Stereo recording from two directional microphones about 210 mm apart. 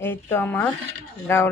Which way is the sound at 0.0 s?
10° left (ahead or behind).